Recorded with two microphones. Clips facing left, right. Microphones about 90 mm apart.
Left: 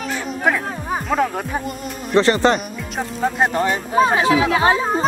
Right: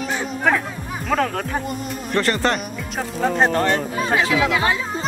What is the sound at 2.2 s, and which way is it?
Speech, 20° left (ahead or behind).